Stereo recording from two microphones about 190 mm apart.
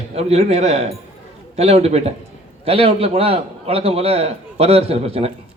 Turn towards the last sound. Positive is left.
turn(degrees=-30)  # may be behind; listen again after turning